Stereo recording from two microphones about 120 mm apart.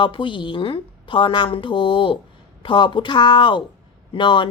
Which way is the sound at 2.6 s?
40° left (ahead or behind).